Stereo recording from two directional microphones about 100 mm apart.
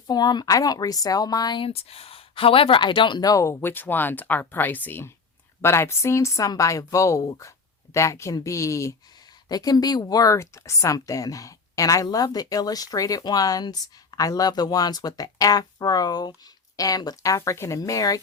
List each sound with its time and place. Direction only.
0.1 s speech: 45° left (ahead or behind)
1.6 s speech: 80° left; by 18.2 s 35° left (ahead or behind)